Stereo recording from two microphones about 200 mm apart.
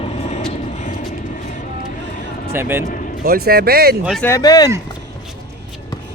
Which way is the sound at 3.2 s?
50° right (ahead or behind).